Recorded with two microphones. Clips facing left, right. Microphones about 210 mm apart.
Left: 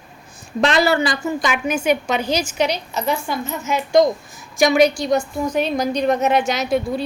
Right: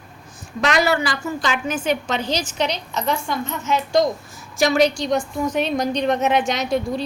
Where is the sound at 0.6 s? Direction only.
30° left (ahead or behind).